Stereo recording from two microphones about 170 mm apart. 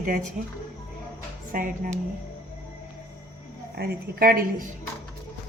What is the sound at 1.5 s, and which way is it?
Speech, 55° right (ahead or behind).